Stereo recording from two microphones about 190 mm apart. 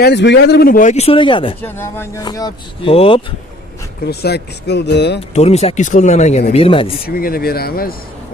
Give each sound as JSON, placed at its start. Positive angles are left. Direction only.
{"t": 0.0, "sound": "speech", "side_deg": 65}
{"t": 1.6, "sound": "speech", "side_deg": 10}
{"t": 4.0, "sound": "speech", "side_deg": 55}
{"t": 5.3, "sound": "speech", "side_deg": 35}
{"t": 7.1, "sound": "speech", "side_deg": 50}